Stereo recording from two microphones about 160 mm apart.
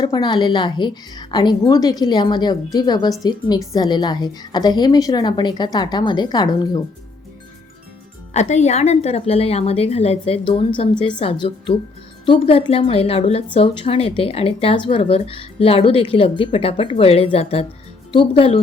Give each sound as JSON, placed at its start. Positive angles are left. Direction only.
{"t": 0.0, "sound": "a woman's voice", "side_deg": 25}
{"t": 8.3, "sound": "a woman's voice", "side_deg": 45}